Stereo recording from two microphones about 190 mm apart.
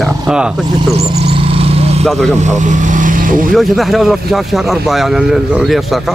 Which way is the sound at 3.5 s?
Centre (ahead or behind).